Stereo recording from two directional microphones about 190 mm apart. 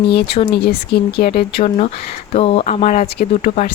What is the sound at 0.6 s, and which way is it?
Speech, 55° left (ahead or behind).